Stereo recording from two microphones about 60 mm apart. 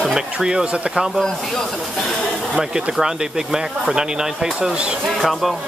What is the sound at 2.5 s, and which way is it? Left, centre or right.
Speech, centre.